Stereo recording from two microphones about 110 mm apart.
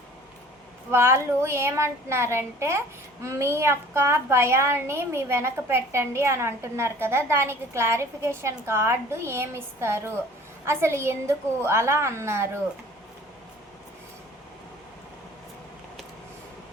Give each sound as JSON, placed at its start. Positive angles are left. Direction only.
{"t": 0.9, "sound": "a woman's voice", "side_deg": -25}